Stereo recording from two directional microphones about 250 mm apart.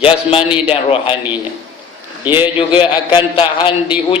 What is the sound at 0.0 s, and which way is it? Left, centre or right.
A man's voice, left.